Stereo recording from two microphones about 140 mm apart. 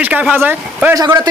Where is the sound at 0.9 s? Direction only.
25° right (ahead or behind).